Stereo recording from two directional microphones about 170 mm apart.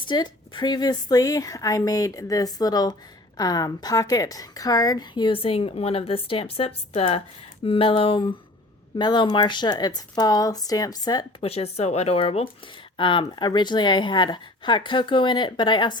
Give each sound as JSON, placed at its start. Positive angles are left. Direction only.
{"t": 0.0, "sound": "a woman's voice", "side_deg": 25}